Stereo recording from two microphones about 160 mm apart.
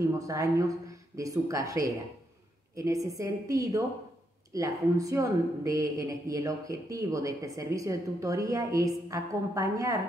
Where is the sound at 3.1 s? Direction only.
20° right (ahead or behind).